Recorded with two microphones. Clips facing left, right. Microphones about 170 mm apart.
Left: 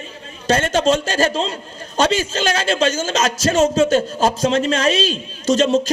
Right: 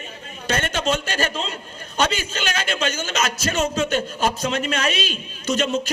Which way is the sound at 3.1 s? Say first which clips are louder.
Left 7 dB; 40° left (ahead or behind).